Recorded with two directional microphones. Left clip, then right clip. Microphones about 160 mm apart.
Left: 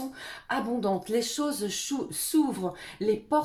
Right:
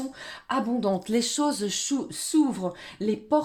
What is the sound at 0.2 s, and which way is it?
Speech, 45° right (ahead or behind).